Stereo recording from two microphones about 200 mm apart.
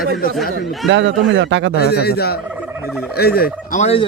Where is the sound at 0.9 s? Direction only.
65° right (ahead or behind).